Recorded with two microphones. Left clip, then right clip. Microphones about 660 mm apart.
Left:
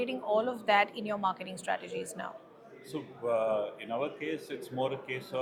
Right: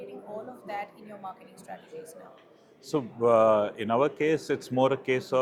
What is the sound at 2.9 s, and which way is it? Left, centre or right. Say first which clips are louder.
Speech: right 9 dB; right.